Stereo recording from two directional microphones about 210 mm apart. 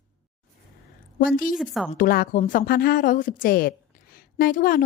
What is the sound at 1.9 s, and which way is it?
A woman's voice, 40° left (ahead or behind).